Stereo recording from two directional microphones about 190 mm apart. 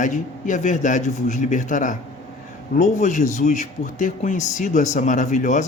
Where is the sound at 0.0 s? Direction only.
40° left (ahead or behind).